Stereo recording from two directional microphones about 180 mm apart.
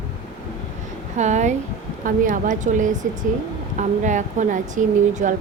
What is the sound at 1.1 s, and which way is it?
A woman's voice, 40° right (ahead or behind).